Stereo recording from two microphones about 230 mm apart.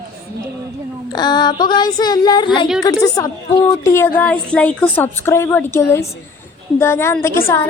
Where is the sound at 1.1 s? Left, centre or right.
Centre.